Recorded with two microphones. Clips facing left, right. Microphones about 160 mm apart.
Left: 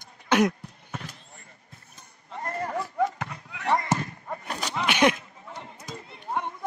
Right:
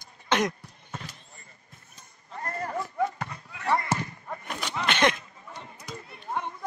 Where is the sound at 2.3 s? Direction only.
15° left (ahead or behind).